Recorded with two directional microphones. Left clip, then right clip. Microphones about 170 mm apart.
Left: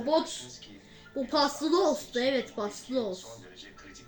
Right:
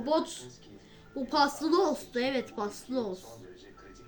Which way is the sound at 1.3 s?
40° right (ahead or behind).